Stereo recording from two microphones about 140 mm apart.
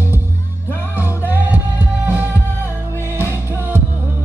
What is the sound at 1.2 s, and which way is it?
Music, 15° right (ahead or behind).